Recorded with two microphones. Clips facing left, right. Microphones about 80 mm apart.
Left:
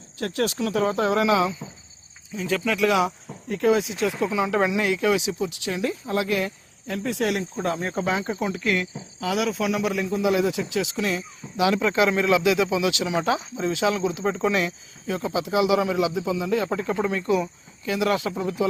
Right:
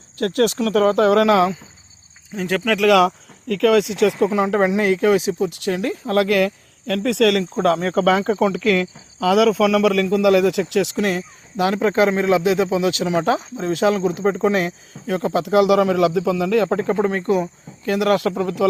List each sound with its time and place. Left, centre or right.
0.2 s speech: right
3.5 s speech: right
4.2 s a man's voice: right
15.0 s speech: right